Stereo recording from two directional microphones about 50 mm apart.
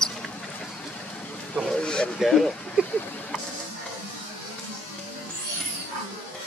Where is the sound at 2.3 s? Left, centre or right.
Centre.